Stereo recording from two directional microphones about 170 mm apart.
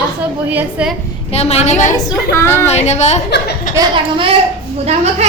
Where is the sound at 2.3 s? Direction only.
15° left (ahead or behind).